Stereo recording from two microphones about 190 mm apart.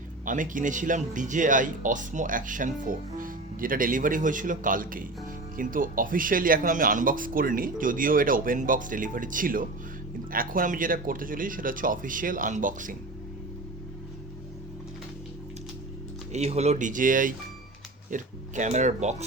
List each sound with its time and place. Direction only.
0.3 s speech: 45° right (ahead or behind)
16.3 s speech: 35° right (ahead or behind)